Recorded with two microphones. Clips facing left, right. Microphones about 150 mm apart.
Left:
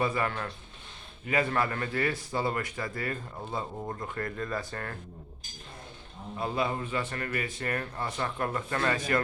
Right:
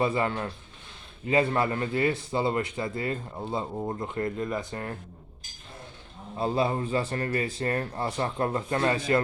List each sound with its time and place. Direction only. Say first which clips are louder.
0.0 s a man's voice: right 3 dB; 25° right (ahead or behind)
6.3 s a man's voice: right 4 dB; 30° right (ahead or behind)